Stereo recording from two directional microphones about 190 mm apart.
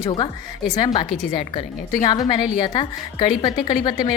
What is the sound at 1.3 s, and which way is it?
A woman's voice, 25° left (ahead or behind).